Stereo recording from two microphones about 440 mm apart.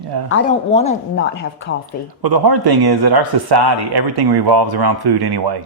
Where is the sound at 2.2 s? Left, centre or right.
Right.